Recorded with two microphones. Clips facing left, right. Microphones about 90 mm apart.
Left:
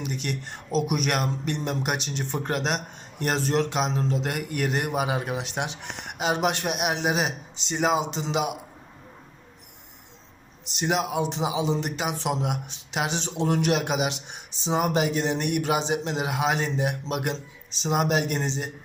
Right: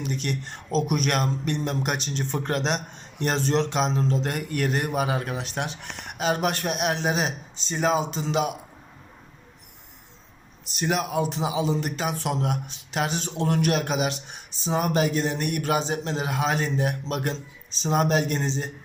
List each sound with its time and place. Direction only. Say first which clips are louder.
0.0 s a man's voice: right 2 dB; 15° left (ahead or behind)
10.7 s a man's voice: even; 20° left (ahead or behind)